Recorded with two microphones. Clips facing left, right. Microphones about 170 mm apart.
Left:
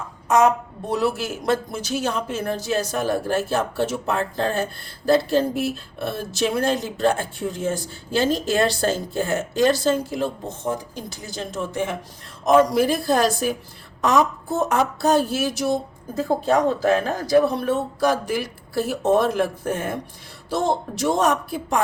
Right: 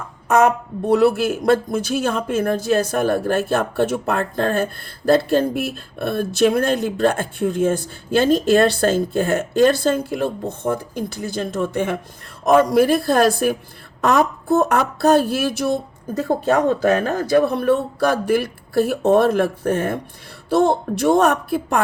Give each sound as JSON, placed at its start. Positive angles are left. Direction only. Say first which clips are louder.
{"t": 0.3, "sound": "speech", "louder": "right 2 dB", "side_deg": -55}